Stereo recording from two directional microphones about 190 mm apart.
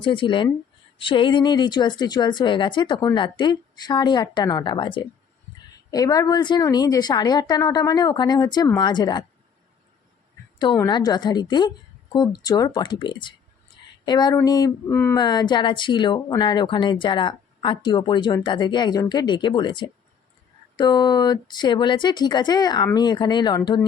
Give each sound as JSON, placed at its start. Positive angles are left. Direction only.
{"t": 0.0, "sound": "a woman's voice", "side_deg": 25}
{"t": 10.6, "sound": "a woman's voice", "side_deg": 25}
{"t": 14.3, "sound": "a sound", "side_deg": 20}
{"t": 15.2, "sound": "a woman's voice", "side_deg": 20}